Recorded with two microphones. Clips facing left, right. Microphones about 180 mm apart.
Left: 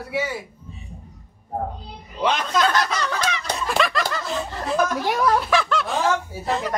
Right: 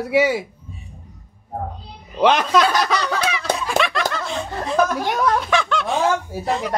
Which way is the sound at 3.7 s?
Centre (ahead or behind).